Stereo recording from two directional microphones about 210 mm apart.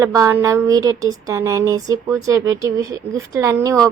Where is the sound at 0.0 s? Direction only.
15° right (ahead or behind).